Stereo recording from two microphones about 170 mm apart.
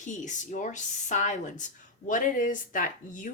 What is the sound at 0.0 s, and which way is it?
Speech, 45° left (ahead or behind).